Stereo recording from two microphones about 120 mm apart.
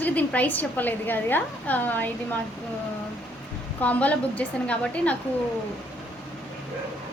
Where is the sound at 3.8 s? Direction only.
10° left (ahead or behind).